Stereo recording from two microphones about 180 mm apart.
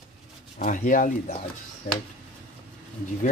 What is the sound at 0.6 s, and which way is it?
Speech, 45° left (ahead or behind).